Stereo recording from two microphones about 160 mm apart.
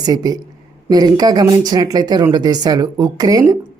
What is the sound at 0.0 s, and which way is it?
Speech, 25° right (ahead or behind).